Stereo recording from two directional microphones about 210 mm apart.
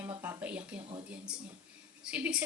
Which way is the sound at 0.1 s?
10° right (ahead or behind).